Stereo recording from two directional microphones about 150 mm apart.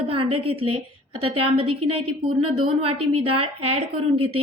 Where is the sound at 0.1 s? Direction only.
40° right (ahead or behind).